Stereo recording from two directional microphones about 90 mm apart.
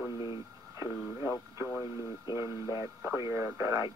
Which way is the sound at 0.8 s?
25° right (ahead or behind).